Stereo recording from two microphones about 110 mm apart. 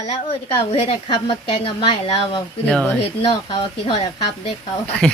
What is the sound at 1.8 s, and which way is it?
A woman's voice, 60° left (ahead or behind).